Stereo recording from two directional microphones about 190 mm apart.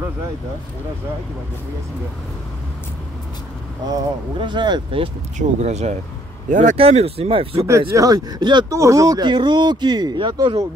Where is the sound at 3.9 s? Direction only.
25° right (ahead or behind).